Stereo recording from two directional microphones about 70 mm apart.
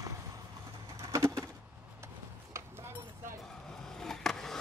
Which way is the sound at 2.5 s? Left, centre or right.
Right.